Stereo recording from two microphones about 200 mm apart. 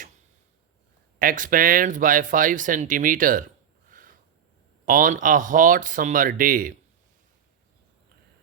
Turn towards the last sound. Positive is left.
turn(degrees=-45)  # may be behind; listen again after turning